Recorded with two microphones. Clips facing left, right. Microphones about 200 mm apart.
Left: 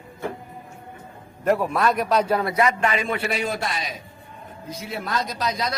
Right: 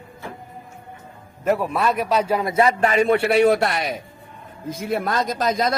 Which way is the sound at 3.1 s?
65° right (ahead or behind).